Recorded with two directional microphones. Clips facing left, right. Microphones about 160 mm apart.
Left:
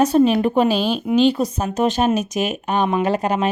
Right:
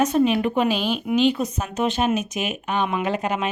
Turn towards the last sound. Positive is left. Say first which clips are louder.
# left 5 dB
turn(degrees=40)  # may be behind; listen again after turning